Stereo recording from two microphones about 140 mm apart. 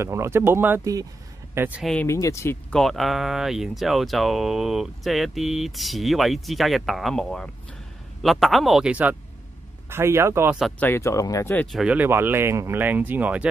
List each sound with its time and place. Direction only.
0.0 s speech: 20° right (ahead or behind)
2.0 s speech: 20° left (ahead or behind)
2.7 s speech: centre (ahead or behind); by 10.5 s 20° right (ahead or behind)
10.8 s speech: 20° left (ahead or behind)
11.6 s speech: centre (ahead or behind)